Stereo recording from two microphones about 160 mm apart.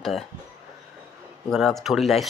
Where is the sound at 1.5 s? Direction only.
Centre (ahead or behind).